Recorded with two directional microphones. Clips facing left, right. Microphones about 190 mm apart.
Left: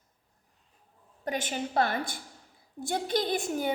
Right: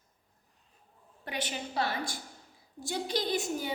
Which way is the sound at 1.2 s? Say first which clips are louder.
Left 5 dB; 45° left (ahead or behind).